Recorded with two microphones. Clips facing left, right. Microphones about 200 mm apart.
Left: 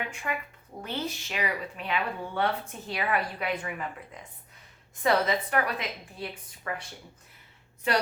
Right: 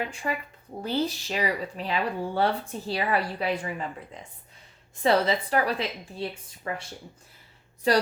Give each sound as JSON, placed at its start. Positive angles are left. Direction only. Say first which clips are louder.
{"t": 0.0, "sound": "a woman's voice", "louder": "right 3 dB", "side_deg": -35}
{"t": 7.9, "sound": "speech", "louder": "right 5 dB", "side_deg": -35}